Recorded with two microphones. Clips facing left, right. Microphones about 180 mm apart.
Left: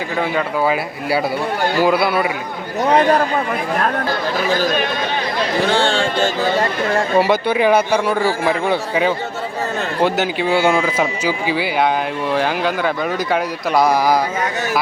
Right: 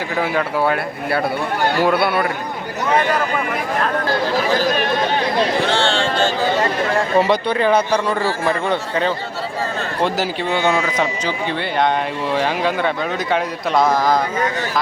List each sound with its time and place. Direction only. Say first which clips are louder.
0.2 s speech: even; centre (ahead or behind)
2.8 s speech: left 4 dB; 35° left (ahead or behind)
7.2 s a man's voice: left 1 dB; 5° left (ahead or behind)